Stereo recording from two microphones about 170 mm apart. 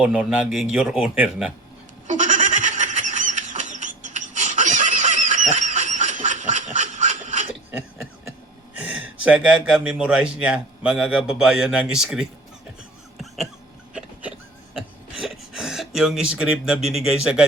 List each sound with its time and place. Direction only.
0.0 s speech: 5° right (ahead or behind)
2.0 s goat: 45° right (ahead or behind)
8.8 s speech: 5° right (ahead or behind)
13.1 s a sound: centre (ahead or behind)